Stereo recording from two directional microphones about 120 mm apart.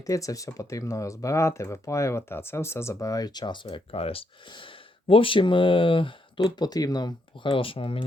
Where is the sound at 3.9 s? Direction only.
55° left (ahead or behind).